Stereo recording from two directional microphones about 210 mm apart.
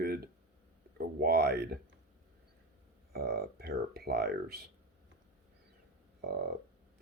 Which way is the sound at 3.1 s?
50° right (ahead or behind).